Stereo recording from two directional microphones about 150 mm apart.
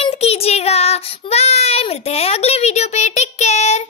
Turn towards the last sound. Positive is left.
turn(degrees=50)  # may be behind; listen again after turning